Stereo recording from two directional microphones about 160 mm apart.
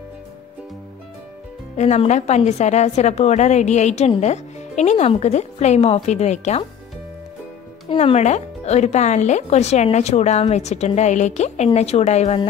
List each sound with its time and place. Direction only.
1.8 s a woman's voice: 45° left (ahead or behind)
7.9 s a woman's voice: 40° left (ahead or behind)